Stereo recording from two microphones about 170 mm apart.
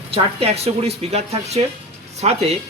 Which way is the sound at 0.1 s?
35° right (ahead or behind).